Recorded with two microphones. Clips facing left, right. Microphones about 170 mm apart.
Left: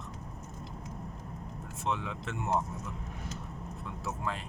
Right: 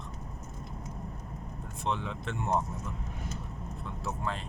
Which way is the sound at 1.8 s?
5° left (ahead or behind).